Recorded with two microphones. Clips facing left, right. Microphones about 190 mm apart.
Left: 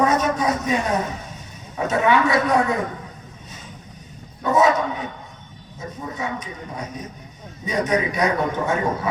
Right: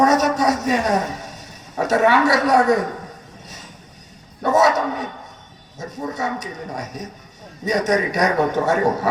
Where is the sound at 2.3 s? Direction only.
80° right.